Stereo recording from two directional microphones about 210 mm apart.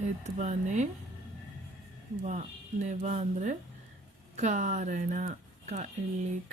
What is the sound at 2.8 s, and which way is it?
Speech, 35° right (ahead or behind).